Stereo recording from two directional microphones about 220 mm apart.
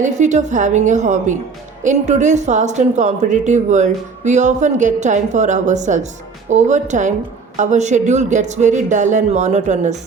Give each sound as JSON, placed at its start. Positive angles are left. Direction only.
{"t": 0.0, "sound": "a woman's voice", "side_deg": -30}